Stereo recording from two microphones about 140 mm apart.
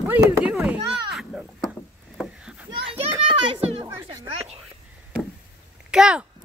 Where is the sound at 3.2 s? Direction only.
40° right (ahead or behind).